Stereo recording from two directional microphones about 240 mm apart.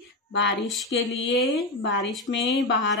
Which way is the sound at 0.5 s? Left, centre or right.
Centre.